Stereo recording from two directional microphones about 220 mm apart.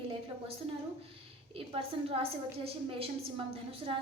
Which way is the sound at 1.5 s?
25° right (ahead or behind).